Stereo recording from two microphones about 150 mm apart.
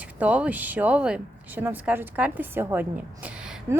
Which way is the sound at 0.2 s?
10° right (ahead or behind).